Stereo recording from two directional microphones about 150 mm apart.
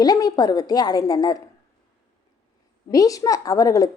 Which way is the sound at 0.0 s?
25° left (ahead or behind).